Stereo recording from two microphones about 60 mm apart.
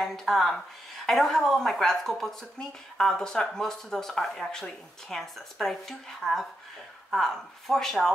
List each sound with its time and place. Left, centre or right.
0.0 s speech: centre